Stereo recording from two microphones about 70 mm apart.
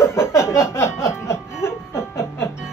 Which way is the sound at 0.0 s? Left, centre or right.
Left.